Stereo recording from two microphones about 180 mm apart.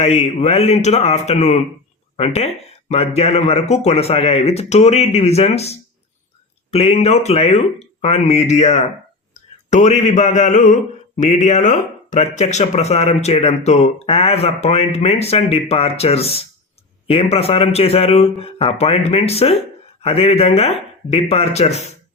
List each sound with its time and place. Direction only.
0.0 s speech: 35° left (ahead or behind)